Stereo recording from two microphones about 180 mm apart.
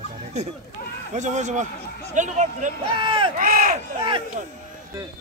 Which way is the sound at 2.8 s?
30° right (ahead or behind).